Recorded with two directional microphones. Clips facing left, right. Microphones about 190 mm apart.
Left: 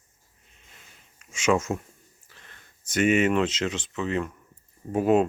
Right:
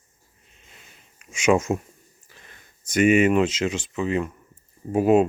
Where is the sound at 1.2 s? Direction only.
15° right (ahead or behind).